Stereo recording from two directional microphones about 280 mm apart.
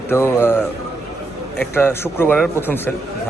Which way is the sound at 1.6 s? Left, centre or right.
Centre.